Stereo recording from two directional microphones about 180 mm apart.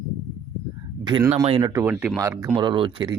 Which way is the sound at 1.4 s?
30° right (ahead or behind).